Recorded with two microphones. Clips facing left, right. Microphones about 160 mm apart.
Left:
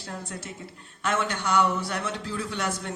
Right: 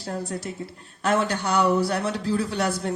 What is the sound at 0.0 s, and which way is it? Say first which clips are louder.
A man's voice: right 7 dB; 35° right (ahead or behind).